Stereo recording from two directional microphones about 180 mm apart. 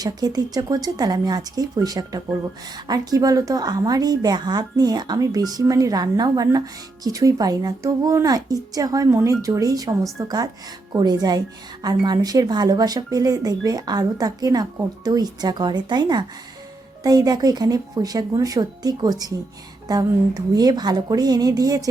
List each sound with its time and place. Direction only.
0.0 s speech: 20° right (ahead or behind)